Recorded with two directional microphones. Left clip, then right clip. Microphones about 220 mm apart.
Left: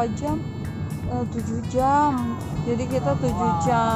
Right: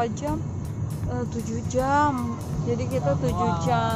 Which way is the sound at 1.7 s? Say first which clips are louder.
Left 2 dB; 5° left (ahead or behind).